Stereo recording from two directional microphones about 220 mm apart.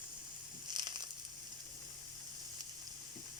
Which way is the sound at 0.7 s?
20° right (ahead or behind).